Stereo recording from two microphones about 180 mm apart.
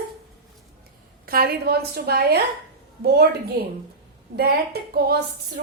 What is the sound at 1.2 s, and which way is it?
A woman's voice, 55° right (ahead or behind).